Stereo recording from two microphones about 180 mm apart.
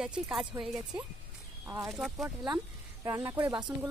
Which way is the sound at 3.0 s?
20° right (ahead or behind).